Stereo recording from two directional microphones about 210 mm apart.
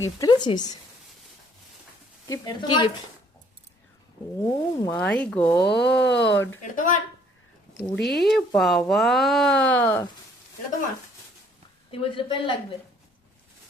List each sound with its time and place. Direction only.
0.2 s a woman's voice: 20° left (ahead or behind)
2.4 s a woman's voice: 20° left (ahead or behind)
4.4 s speech: 5° left (ahead or behind)
5.6 s speech: 55° left (ahead or behind)
6.6 s speech: 40° left (ahead or behind)
7.7 s speech: 55° left (ahead or behind)
8.2 s speech: centre (ahead or behind)
11.9 s a woman's voice: 25° left (ahead or behind)